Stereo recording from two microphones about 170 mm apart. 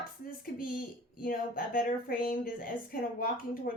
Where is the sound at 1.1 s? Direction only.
55° left (ahead or behind).